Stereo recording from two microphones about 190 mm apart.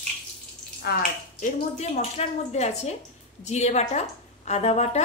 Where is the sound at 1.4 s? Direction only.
35° left (ahead or behind).